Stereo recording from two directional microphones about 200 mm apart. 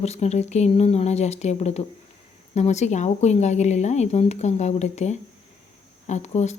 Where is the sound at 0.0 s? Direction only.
35° left (ahead or behind).